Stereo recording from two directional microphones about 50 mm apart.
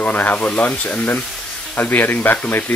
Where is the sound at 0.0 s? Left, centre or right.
Left.